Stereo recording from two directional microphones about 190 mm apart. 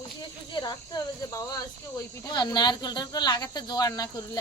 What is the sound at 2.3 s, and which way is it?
Speech, 20° left (ahead or behind).